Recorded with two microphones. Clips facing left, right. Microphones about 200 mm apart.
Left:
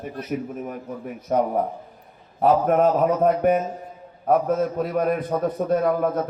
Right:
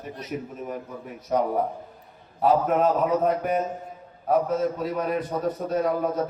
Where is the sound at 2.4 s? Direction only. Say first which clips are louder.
Left 3 dB; 50° left (ahead or behind).